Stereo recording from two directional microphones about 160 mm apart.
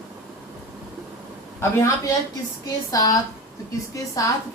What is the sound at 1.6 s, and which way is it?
A woman's voice, 15° left (ahead or behind).